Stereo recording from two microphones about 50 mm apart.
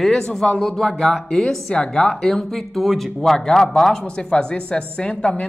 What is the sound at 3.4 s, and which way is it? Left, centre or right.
A woman's voice, centre.